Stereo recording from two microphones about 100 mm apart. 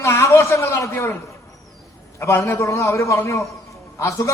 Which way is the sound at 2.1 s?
30° left (ahead or behind).